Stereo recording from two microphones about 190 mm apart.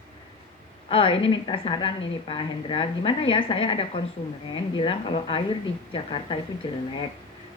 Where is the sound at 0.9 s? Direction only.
30° left (ahead or behind).